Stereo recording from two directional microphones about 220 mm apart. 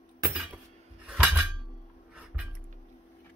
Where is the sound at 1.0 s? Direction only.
5° right (ahead or behind).